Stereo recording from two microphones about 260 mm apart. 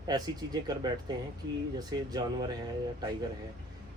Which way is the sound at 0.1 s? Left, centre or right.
Centre.